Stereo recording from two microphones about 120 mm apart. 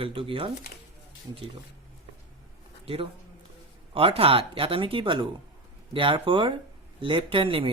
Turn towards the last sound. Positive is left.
turn(degrees=-45)  # may be behind; listen again after turning